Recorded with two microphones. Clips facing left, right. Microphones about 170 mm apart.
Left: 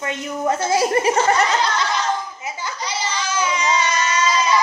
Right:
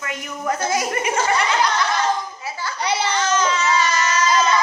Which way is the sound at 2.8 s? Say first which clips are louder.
Right 7 dB; 60° right (ahead or behind).